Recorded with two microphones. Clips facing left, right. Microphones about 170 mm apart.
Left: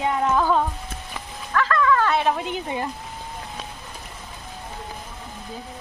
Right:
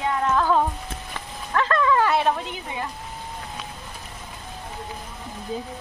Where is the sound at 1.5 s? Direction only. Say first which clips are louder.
Even; 25° right (ahead or behind).